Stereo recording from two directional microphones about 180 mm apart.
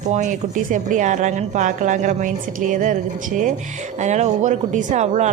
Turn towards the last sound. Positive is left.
turn(degrees=-40)  # may be behind; listen again after turning